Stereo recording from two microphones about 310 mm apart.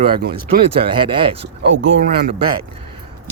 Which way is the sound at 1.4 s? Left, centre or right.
Right.